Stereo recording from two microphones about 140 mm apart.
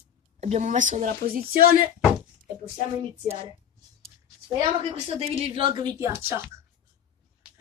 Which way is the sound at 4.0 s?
40° right (ahead or behind).